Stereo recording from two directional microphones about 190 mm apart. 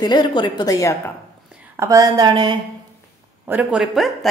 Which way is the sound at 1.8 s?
20° right (ahead or behind).